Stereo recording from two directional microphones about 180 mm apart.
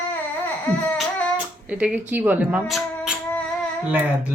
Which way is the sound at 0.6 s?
10° left (ahead or behind).